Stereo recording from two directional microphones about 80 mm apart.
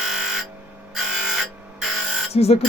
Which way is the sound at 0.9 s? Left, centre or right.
Centre.